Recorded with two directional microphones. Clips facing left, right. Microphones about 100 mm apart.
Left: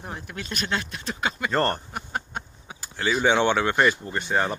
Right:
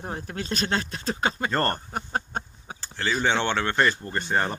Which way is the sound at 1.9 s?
35° right (ahead or behind).